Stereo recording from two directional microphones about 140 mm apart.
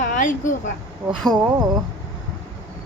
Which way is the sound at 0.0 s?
65° left (ahead or behind).